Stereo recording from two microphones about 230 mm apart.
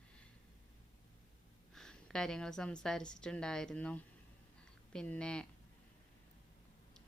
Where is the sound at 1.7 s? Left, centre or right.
Centre.